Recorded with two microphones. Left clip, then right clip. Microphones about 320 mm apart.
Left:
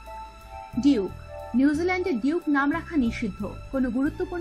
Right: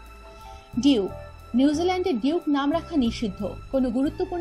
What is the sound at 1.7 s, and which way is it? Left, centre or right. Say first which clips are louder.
A woman's voice: right 2 dB; centre.